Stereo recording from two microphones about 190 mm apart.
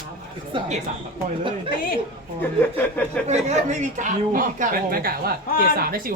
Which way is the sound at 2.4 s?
10° left (ahead or behind).